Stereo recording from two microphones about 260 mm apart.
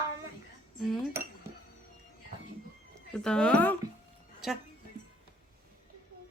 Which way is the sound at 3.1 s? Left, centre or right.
Centre.